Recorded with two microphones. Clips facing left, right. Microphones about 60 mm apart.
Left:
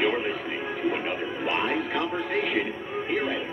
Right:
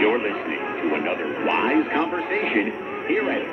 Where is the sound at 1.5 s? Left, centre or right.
Right.